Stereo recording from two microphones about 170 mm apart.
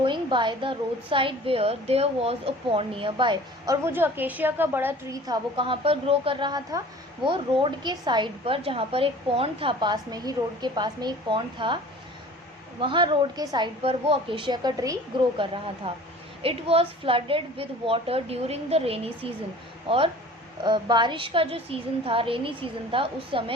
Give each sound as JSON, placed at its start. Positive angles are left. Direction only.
{"t": 0.0, "sound": "a woman's voice", "side_deg": -25}
{"t": 3.8, "sound": "a woman's voice", "side_deg": -10}
{"t": 12.8, "sound": "a woman's voice", "side_deg": -30}
{"t": 15.8, "sound": "a woman's voice", "side_deg": -35}
{"t": 20.7, "sound": "a woman's voice", "side_deg": -25}